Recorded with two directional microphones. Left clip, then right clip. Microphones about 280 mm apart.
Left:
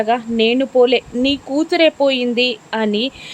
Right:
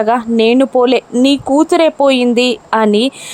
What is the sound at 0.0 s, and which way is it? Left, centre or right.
Speech, centre.